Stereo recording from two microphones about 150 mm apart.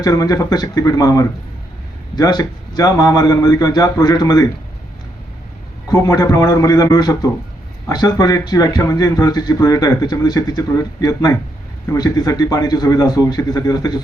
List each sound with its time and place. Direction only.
0.0 s a man's voice: 25° left (ahead or behind)
5.9 s a man's voice: 20° left (ahead or behind)